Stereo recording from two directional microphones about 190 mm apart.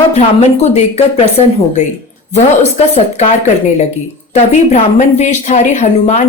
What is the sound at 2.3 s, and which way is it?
Speech, 35° left (ahead or behind).